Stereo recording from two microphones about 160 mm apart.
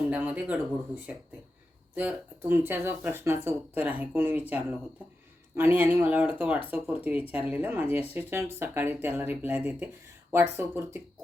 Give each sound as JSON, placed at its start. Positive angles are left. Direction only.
{"t": 0.1, "sound": "speech", "side_deg": -10}